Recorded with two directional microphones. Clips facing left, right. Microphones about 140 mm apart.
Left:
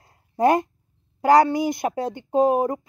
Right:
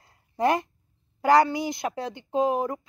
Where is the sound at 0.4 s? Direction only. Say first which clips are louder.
Left 5 dB; 45° left (ahead or behind).